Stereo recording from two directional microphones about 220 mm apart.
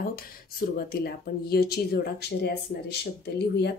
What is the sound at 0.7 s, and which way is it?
A woman's voice, 45° left (ahead or behind).